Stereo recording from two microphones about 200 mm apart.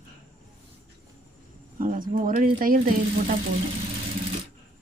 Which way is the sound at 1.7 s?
40° right (ahead or behind).